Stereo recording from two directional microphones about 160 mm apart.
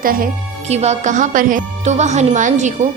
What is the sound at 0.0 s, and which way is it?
Speech, 60° right (ahead or behind).